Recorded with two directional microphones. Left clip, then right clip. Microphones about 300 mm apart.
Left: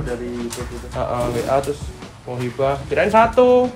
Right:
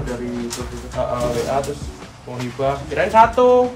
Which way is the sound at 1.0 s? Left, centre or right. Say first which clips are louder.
Right 1 dB; centre.